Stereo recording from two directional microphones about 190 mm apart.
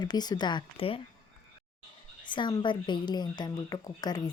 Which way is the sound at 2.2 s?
25° left (ahead or behind).